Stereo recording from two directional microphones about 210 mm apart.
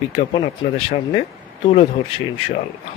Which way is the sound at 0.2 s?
25° left (ahead or behind).